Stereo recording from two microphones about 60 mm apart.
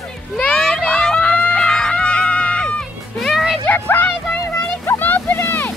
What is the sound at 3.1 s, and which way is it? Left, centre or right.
Music, centre.